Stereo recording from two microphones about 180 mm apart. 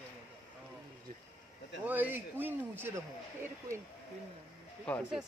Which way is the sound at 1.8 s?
10° right (ahead or behind).